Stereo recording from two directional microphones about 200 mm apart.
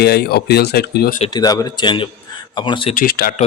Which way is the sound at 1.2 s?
20° left (ahead or behind).